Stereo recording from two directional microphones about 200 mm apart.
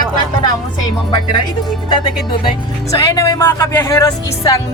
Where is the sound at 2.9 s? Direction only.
15° left (ahead or behind).